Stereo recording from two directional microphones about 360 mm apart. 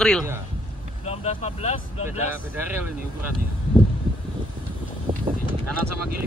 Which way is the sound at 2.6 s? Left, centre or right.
Centre.